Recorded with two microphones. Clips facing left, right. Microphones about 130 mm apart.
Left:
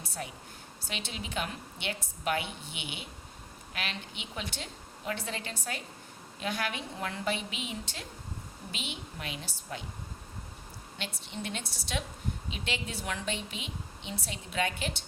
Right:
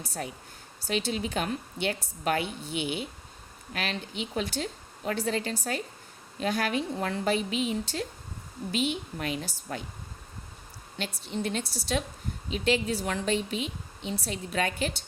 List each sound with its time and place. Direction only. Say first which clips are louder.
0.0 s a woman's voice: right 4 dB; 40° right (ahead or behind)
10.9 s a woman's voice: right 7 dB; 40° right (ahead or behind)